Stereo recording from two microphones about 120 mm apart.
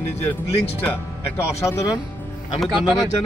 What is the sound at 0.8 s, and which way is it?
Speech, 25° left (ahead or behind).